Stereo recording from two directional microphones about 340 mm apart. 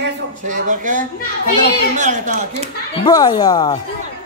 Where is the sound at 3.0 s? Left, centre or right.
Centre.